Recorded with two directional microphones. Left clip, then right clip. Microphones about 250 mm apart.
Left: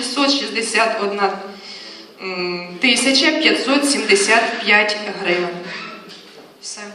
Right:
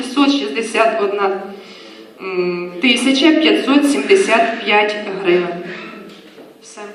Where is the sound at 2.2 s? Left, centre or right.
Left.